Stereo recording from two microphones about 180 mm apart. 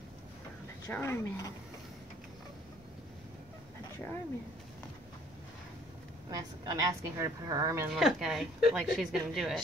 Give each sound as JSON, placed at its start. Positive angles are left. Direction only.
{"t": 0.8, "sound": "speech", "side_deg": 15}
{"t": 6.3, "sound": "speech", "side_deg": -20}
{"t": 7.9, "sound": "a woman's voice", "side_deg": 0}